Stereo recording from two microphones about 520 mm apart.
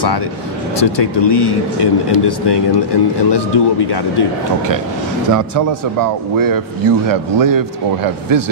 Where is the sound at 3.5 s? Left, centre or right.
Left.